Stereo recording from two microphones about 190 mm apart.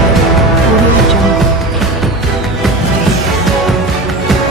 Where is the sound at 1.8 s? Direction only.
Centre (ahead or behind).